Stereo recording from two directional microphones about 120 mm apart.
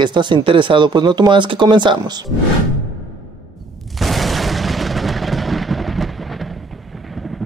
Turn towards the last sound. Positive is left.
turn(degrees=0)  # may be behind; listen again after turning